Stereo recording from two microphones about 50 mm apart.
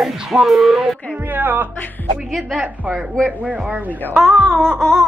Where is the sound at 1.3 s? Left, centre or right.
Right.